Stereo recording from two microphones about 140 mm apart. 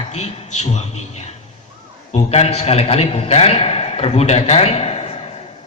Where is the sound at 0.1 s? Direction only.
50° left (ahead or behind).